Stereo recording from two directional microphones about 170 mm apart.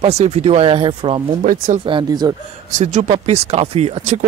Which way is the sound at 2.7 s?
45° right (ahead or behind).